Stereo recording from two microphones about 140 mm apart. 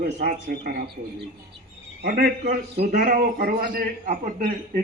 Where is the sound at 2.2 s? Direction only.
90° right.